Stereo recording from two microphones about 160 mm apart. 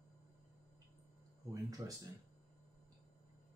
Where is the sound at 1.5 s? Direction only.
20° right (ahead or behind).